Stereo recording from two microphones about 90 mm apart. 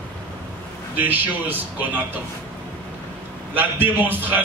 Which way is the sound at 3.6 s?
20° right (ahead or behind).